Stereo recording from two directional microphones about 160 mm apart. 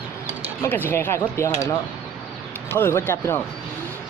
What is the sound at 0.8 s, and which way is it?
Speech, 15° left (ahead or behind).